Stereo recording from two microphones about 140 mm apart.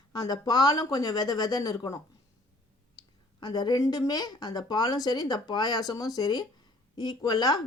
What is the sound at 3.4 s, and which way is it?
Speech, 30° left (ahead or behind).